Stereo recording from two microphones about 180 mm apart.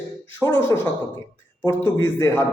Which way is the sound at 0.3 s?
15° left (ahead or behind).